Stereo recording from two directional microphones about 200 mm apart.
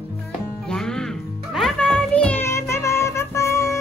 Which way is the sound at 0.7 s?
5° left (ahead or behind).